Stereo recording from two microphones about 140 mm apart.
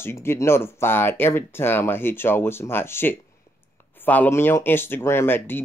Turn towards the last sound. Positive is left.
turn(degrees=15)  # may be behind; listen again after turning